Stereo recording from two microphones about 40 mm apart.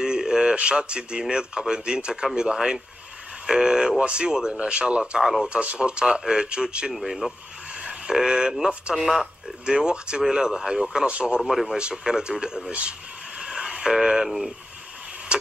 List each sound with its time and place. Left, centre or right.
0.0 s a sound: centre
1.3 s speech: right
6.9 s speech: centre
7.8 s speech: right
8.9 s speech: centre
9.7 s speech: right
11.4 s speech: centre
11.7 s speech: centre
13.4 s a sound: centre